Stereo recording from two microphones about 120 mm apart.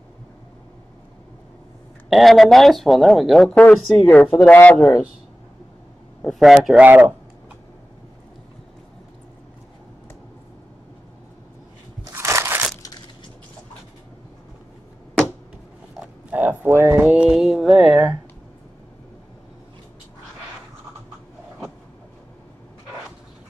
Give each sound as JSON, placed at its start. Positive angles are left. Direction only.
{"t": 2.0, "sound": "speech", "side_deg": 0}
{"t": 6.2, "sound": "speech", "side_deg": 0}
{"t": 6.8, "sound": "speech", "side_deg": -15}
{"t": 12.0, "sound": "crushing", "side_deg": -25}
{"t": 16.0, "sound": "a sound", "side_deg": -10}